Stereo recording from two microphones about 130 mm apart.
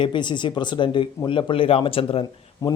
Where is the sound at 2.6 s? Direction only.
25° left (ahead or behind).